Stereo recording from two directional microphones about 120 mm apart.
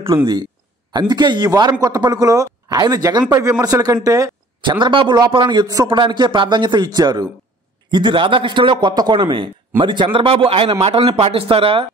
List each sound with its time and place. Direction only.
0.9 s speech: 35° right (ahead or behind)
4.6 s a man's voice: 40° right (ahead or behind)